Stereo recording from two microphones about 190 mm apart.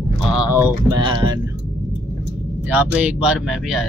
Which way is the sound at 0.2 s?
5° right (ahead or behind).